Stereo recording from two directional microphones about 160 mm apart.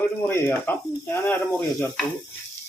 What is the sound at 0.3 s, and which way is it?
Speech, 15° left (ahead or behind).